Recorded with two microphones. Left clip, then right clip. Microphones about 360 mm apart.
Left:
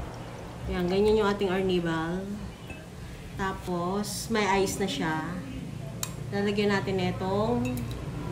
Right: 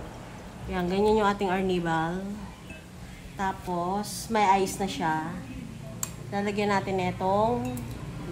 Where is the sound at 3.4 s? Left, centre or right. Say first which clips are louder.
Right 2 dB; centre.